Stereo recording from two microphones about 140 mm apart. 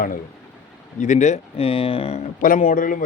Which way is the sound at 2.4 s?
75° left (ahead or behind).